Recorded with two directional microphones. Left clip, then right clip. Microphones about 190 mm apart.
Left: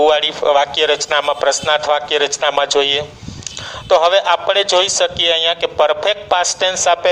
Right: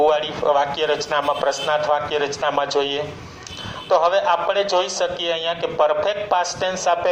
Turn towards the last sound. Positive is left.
turn(degrees=55)  # may be behind; listen again after turning